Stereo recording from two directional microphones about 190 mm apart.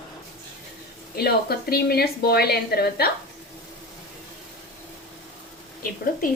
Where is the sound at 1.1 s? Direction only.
55° left (ahead or behind).